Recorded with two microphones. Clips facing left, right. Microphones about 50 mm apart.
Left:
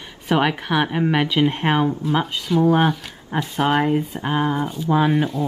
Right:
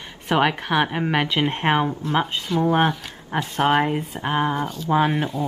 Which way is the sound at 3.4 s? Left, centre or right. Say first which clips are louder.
Even; centre.